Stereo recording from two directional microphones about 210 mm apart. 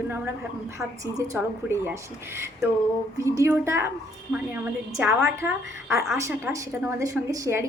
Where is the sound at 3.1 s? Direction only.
15° right (ahead or behind).